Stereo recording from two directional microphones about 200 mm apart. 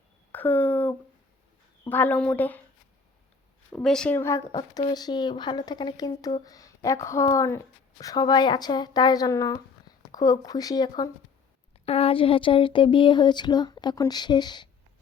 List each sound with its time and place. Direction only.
0.3 s a sound: 10° left (ahead or behind)
1.9 s speech: 10° left (ahead or behind)
3.7 s speech: 5° left (ahead or behind); by 14.7 s 20° left (ahead or behind)